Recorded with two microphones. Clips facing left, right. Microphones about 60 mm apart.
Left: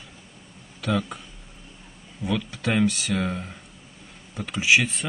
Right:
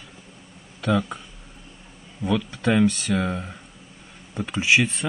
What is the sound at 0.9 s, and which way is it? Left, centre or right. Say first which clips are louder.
Speech: right 3 dB; centre.